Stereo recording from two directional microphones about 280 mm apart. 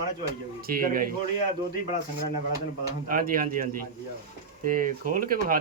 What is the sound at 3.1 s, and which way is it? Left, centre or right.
Speech, right.